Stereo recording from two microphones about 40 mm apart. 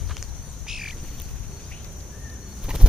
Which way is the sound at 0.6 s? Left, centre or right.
Centre.